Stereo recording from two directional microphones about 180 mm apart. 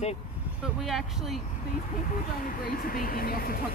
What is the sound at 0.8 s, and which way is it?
Speech, centre (ahead or behind).